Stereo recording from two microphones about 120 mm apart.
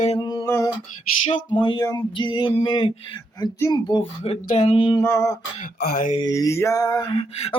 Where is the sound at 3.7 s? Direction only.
40° left (ahead or behind).